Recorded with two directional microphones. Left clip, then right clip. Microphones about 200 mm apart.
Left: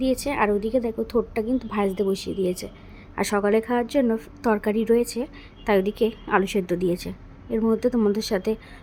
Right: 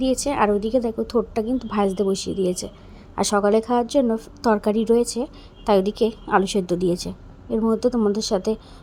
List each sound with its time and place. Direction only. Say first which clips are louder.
0.0 s a woman's voice: right 2 dB; centre (ahead or behind)